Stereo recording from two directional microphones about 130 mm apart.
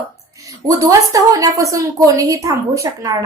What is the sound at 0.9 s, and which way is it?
Speech, 25° right (ahead or behind).